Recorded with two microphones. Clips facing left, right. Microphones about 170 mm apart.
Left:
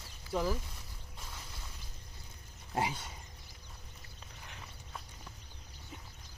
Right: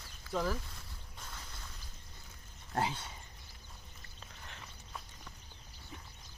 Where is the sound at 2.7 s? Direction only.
10° left (ahead or behind).